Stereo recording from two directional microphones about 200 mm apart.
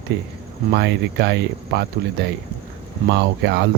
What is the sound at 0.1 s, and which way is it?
Speech, 55° right (ahead or behind).